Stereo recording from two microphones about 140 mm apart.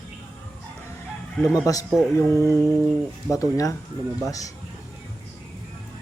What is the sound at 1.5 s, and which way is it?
Speech, 25° left (ahead or behind).